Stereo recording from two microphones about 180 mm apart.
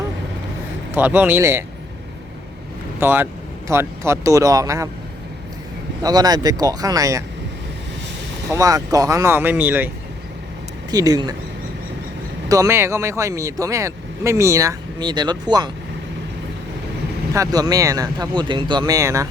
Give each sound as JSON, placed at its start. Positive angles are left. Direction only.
{"t": 0.9, "sound": "speech", "side_deg": -10}
{"t": 3.0, "sound": "speech", "side_deg": -10}
{"t": 6.0, "sound": "speech", "side_deg": -20}
{"t": 8.5, "sound": "speech", "side_deg": -20}
{"t": 10.9, "sound": "speech", "side_deg": -20}
{"t": 12.5, "sound": "speech", "side_deg": -15}
{"t": 17.3, "sound": "speech", "side_deg": -20}